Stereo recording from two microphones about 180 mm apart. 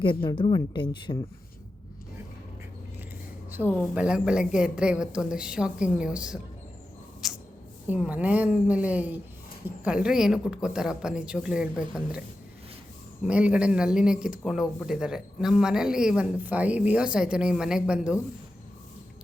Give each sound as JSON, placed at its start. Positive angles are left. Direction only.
{"t": 0.0, "sound": "a woman's voice", "side_deg": 30}
{"t": 3.8, "sound": "speech", "side_deg": -5}
{"t": 7.2, "sound": "a sound", "side_deg": 0}
{"t": 7.9, "sound": "a woman's voice", "side_deg": -10}
{"t": 13.2, "sound": "speech", "side_deg": -5}